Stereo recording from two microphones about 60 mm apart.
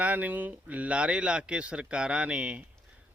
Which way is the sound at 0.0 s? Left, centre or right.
Right.